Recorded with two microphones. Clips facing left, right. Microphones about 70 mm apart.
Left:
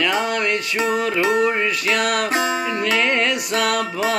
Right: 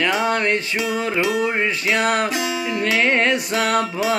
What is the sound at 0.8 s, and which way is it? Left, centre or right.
Music, left.